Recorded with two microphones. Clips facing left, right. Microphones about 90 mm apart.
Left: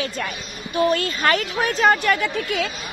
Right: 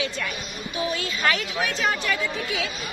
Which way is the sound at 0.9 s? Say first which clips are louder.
Left 4 dB; 55° left (ahead or behind).